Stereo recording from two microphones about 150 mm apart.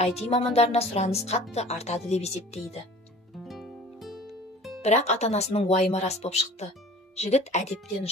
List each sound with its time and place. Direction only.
0.0 s speech: 45° left (ahead or behind)
3.3 s music: centre (ahead or behind)
4.8 s speech: 45° left (ahead or behind)